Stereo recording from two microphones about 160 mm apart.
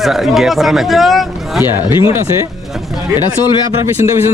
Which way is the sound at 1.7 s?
30° left (ahead or behind).